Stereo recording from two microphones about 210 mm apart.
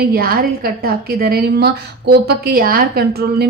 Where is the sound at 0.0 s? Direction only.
45° right (ahead or behind).